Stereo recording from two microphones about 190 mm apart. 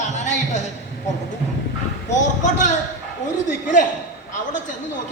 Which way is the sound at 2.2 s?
40° left (ahead or behind).